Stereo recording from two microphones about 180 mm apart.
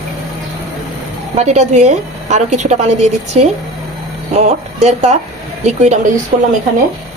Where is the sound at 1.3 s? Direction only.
40° right (ahead or behind).